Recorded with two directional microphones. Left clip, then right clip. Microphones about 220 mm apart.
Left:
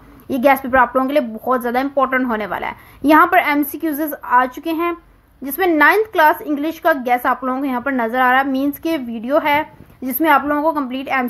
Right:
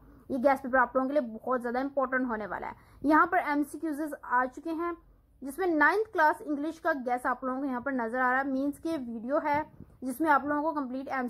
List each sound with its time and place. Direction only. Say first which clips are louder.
0.3 s a woman's voice: left 12 dB; 35° left (ahead or behind)